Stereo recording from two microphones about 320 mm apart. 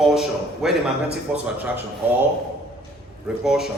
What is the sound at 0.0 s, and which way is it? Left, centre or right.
A man's voice, centre.